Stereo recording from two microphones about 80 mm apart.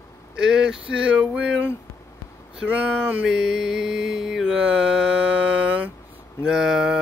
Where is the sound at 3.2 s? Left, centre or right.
Centre.